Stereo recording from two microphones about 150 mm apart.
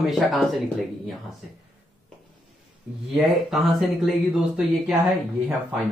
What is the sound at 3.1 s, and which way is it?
A man's voice, centre (ahead or behind).